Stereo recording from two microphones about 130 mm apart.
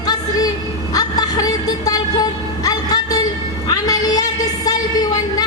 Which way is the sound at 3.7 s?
30° left (ahead or behind).